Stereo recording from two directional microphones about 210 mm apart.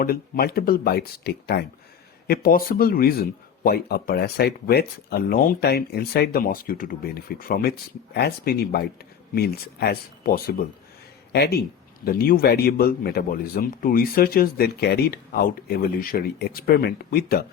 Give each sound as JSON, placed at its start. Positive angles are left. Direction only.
{"t": 0.0, "sound": "speech", "side_deg": 45}